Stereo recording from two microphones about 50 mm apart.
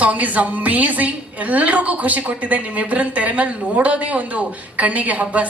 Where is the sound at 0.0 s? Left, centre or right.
Right.